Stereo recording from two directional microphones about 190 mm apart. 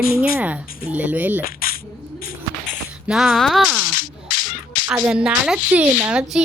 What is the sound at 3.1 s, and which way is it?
Speech, centre (ahead or behind).